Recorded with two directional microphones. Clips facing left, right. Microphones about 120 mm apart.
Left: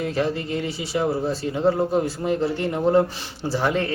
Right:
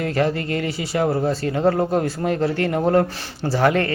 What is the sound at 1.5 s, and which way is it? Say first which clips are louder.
Mantra: right 1 dB; 65° right (ahead or behind).